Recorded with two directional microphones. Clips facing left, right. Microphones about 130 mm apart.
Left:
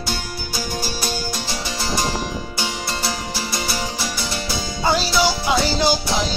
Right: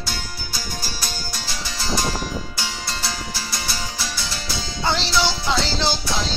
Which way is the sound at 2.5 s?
20° left (ahead or behind).